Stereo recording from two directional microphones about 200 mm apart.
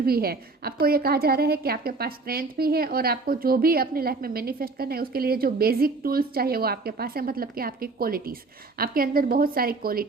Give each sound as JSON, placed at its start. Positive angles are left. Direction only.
{"t": 0.0, "sound": "a woman's voice", "side_deg": -50}